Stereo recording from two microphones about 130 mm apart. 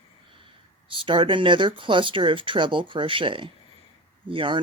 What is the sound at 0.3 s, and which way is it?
Speech, 40° right (ahead or behind).